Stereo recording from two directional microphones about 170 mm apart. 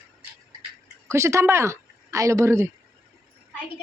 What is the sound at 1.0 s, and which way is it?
Speech, 15° right (ahead or behind).